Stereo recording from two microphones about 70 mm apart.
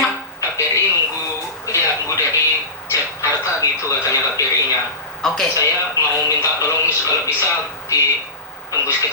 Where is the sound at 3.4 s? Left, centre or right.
Left.